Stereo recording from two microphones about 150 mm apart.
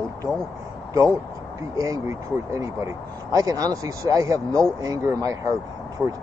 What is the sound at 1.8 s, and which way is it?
Speech, 20° right (ahead or behind).